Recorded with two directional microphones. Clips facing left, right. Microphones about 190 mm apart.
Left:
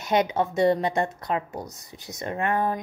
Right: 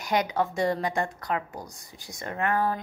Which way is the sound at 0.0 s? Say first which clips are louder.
Left 3 dB; 25° left (ahead or behind).